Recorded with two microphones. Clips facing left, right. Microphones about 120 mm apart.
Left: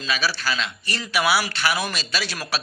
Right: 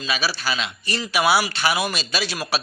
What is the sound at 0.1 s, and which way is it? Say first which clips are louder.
A man's voice: even; 15° right (ahead or behind).